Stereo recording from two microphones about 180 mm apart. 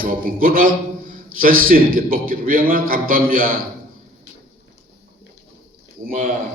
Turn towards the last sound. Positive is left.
turn(degrees=-50)  # may be behind; listen again after turning